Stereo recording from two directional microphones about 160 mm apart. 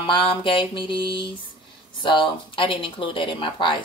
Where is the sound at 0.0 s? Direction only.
30° left (ahead or behind).